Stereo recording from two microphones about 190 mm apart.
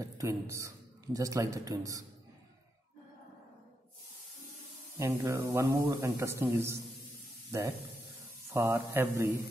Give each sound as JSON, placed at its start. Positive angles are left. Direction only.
{"t": 0.0, "sound": "a man's voice", "side_deg": -15}
{"t": 4.9, "sound": "speech", "side_deg": -15}
{"t": 8.5, "sound": "speech", "side_deg": -15}